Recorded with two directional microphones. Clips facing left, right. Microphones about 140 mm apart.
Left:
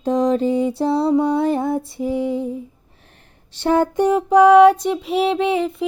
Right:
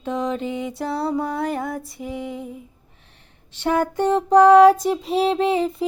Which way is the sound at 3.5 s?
30° left (ahead or behind).